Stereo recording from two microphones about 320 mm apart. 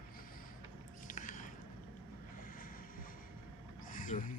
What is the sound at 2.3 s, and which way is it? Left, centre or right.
Vehicle, left.